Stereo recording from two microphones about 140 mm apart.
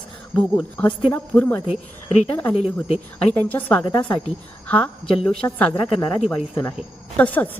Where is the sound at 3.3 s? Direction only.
10° left (ahead or behind).